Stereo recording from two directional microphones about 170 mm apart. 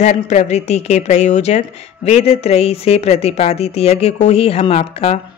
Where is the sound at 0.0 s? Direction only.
45° left (ahead or behind).